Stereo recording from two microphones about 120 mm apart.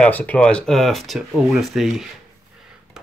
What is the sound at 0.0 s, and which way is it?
Speech, 10° left (ahead or behind).